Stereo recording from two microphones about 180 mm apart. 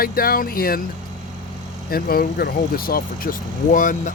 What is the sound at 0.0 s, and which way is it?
Speech, 55° left (ahead or behind).